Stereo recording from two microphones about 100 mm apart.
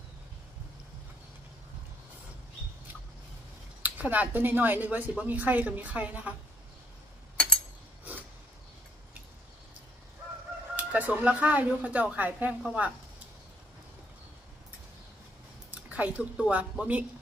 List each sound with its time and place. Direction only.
3.8 s speech: 15° right (ahead or behind)
10.8 s speech: 15° right (ahead or behind)
15.9 s speech: 15° right (ahead or behind)